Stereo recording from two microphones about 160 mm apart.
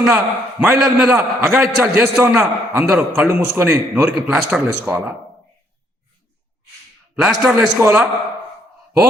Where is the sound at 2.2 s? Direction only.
15° right (ahead or behind).